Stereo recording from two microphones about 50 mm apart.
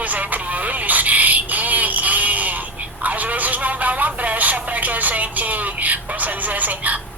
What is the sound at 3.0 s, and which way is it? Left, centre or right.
Telephone, right.